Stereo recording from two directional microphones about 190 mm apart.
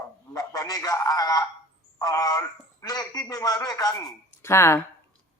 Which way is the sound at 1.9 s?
20° left (ahead or behind).